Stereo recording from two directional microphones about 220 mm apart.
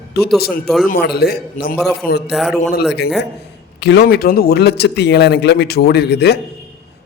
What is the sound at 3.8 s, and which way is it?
Speech, 50° left (ahead or behind).